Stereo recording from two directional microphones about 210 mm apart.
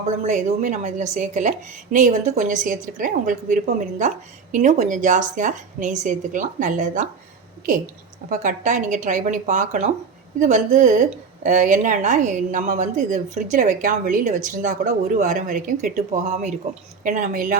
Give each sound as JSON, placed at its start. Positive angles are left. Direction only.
{"t": 0.3, "sound": "a woman's voice", "side_deg": -35}
{"t": 8.3, "sound": "a woman's voice", "side_deg": -35}